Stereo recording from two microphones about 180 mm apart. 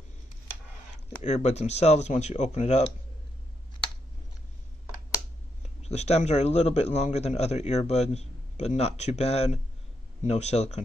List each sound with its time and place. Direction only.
1.2 s a man's voice: 40° left (ahead or behind)
5.8 s a man's voice: 35° left (ahead or behind)